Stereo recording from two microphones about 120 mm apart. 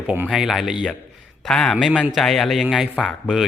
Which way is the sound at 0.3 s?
5° right (ahead or behind).